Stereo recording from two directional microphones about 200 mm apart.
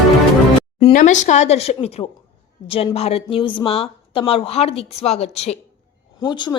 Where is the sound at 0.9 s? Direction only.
40° left (ahead or behind).